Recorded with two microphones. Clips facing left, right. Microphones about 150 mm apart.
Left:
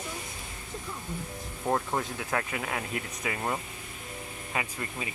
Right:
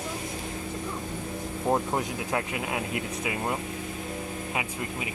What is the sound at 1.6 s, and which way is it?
Speech, 15° right (ahead or behind).